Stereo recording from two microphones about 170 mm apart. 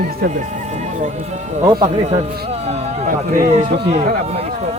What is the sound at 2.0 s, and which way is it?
A man's voice, 40° right (ahead or behind).